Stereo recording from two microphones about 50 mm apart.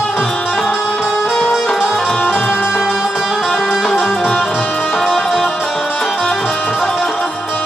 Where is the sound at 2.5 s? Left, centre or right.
Centre.